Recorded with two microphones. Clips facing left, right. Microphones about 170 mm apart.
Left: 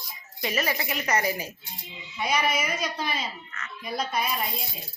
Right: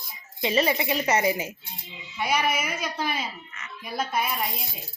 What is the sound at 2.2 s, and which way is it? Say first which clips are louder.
Speech: even; 10° right (ahead or behind).